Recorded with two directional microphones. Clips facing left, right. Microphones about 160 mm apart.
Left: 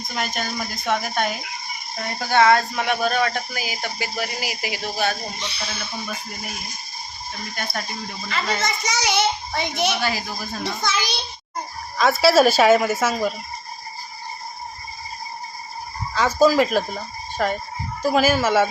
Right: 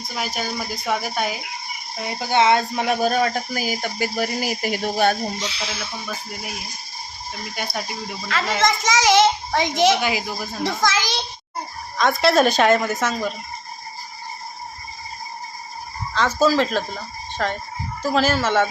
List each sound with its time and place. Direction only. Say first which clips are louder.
0.2 s speech: even; 5° right (ahead or behind)
2.4 s speech: left 1 dB; 20° right (ahead or behind)
2.8 s speech: right 2 dB; 35° right (ahead or behind)
5.4 s a child's voice: right 3 dB; 90° right
5.8 s speech: even; centre (ahead or behind)
8.3 s a child's voice: right 4 dB; 85° right
10.0 s speech: right 2 dB; 15° right (ahead or behind)
10.6 s a child's voice: right 4 dB; 90° right
11.9 s a woman's voice: left 1 dB; 5° left (ahead or behind)
16.1 s a woman's voice: left 2 dB; 10° left (ahead or behind)